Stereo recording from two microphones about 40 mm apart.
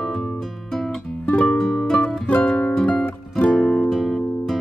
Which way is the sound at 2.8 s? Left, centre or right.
Left.